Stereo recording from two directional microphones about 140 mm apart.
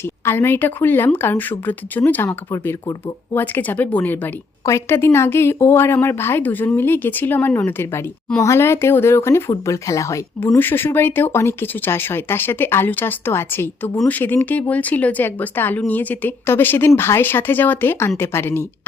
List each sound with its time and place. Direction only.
0.0 s speech: 15° left (ahead or behind)